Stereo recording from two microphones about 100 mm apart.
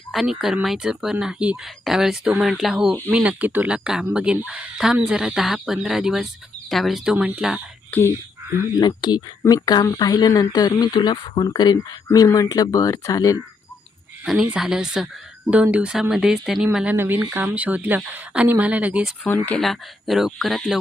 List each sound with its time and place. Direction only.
0.1 s speech: 5° right (ahead or behind)
7.9 s speech: 15° left (ahead or behind)
8.8 s speech: 45° left (ahead or behind)
9.4 s speech: 30° left (ahead or behind)
9.8 s speech: 40° left (ahead or behind)
14.5 s speech: 5° right (ahead or behind)
16.7 s speech: 15° right (ahead or behind)
19.2 s speech: 10° left (ahead or behind)
19.6 s speech: centre (ahead or behind)